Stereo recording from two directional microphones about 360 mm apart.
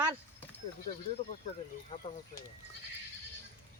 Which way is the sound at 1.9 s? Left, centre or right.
Centre.